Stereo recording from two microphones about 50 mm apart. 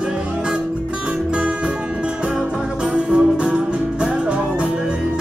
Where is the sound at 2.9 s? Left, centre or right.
Right.